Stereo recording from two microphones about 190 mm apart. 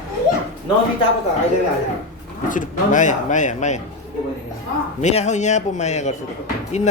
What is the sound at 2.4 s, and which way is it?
Speech, 45° left (ahead or behind).